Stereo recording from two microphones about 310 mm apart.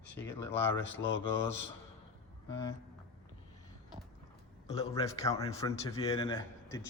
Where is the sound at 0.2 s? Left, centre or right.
Centre.